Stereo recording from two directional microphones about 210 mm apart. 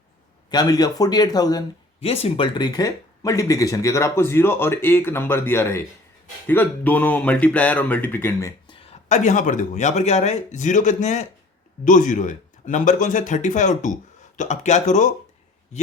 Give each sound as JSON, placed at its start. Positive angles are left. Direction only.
{"t": 0.5, "sound": "a man's voice", "side_deg": 20}